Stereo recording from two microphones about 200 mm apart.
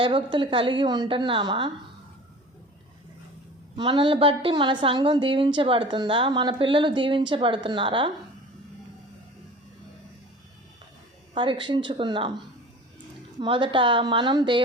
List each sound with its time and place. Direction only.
0.0 s a woman's voice: 25° right (ahead or behind)
3.8 s a woman's voice: 25° right (ahead or behind)
11.3 s a woman's voice: 25° right (ahead or behind)
13.4 s a woman's voice: 25° right (ahead or behind)